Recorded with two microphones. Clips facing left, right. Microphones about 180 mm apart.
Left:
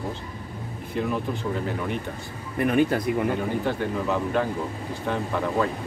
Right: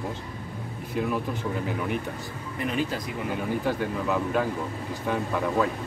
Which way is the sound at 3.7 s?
5° right (ahead or behind).